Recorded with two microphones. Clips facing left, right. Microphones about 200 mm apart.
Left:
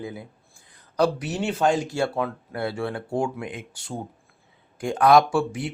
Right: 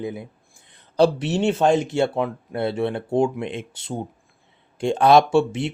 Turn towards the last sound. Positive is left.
turn(degrees=-25)  # may be behind; listen again after turning